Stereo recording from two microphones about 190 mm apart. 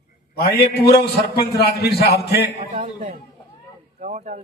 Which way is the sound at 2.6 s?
30° right (ahead or behind).